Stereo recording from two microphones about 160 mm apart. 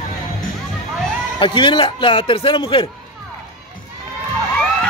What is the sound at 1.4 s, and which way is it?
A man's voice, 30° left (ahead or behind).